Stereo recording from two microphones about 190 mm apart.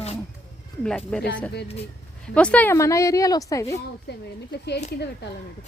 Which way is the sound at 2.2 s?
5° left (ahead or behind).